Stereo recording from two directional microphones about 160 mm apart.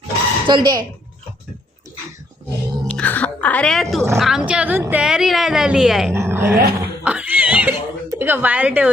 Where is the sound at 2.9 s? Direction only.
10° left (ahead or behind).